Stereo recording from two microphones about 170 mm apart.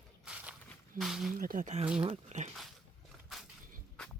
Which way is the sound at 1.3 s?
55° right (ahead or behind).